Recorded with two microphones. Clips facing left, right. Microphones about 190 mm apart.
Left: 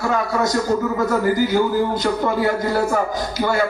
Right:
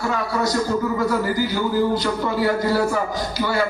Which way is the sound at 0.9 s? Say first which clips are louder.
Left 3 dB; 50° left (ahead or behind).